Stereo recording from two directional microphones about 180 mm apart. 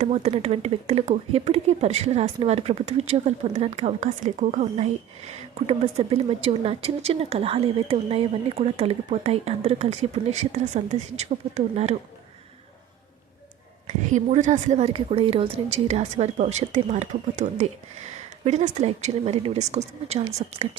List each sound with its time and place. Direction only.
0.0 s speech: 35° right (ahead or behind)
13.8 s speech: 40° right (ahead or behind)